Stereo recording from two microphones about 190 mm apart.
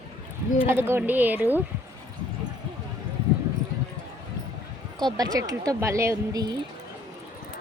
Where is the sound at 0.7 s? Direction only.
10° right (ahead or behind).